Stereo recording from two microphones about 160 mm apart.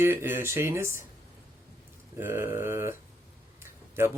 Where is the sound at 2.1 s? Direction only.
15° right (ahead or behind).